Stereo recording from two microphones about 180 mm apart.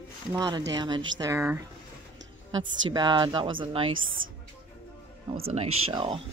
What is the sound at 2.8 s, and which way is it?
Speech, 25° right (ahead or behind).